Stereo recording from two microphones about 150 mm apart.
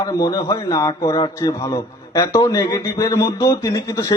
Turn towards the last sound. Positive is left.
turn(degrees=20)  # may be behind; listen again after turning